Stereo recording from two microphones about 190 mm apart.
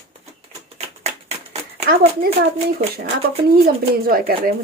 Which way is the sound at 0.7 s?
35° right (ahead or behind).